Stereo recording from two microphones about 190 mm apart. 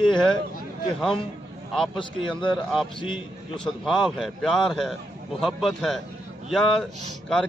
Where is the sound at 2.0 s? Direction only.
25° left (ahead or behind).